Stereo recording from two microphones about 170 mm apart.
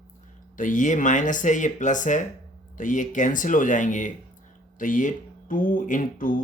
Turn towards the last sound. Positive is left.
turn(degrees=55)  # may be behind; listen again after turning